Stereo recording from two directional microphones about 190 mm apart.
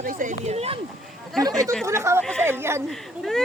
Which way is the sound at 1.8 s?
15° right (ahead or behind).